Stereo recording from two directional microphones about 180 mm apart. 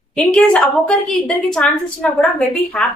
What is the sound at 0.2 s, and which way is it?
A woman's voice, 5° left (ahead or behind).